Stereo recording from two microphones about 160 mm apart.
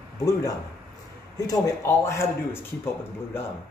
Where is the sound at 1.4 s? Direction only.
20° left (ahead or behind).